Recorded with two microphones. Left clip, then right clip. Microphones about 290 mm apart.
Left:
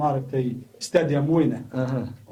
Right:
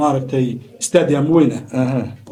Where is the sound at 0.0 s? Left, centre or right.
Right.